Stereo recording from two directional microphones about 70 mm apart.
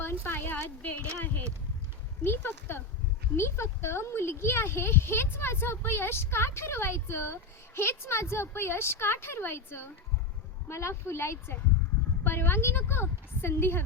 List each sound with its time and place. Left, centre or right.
0.0 s speech: left